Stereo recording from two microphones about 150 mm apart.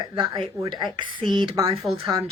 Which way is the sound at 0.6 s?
30° right (ahead or behind).